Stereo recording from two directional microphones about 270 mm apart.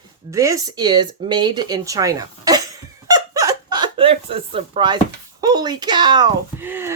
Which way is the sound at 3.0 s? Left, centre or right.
Centre.